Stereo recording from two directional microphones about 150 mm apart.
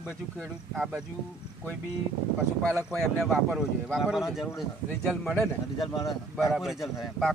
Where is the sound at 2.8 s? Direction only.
Centre (ahead or behind).